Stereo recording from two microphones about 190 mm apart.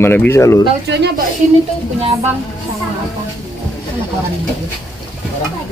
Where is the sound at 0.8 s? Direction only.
60° right (ahead or behind).